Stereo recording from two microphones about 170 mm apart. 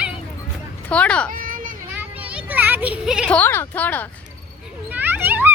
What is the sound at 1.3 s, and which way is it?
Children playing, 55° right (ahead or behind).